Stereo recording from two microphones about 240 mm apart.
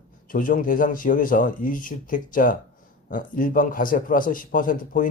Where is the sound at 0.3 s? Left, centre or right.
Left.